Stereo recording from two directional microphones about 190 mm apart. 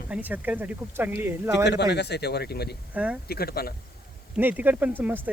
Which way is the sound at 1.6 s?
60° left (ahead or behind).